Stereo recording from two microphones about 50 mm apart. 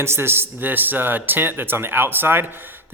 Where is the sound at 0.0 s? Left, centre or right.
Right.